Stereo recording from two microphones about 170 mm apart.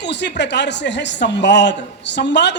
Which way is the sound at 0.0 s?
90° left.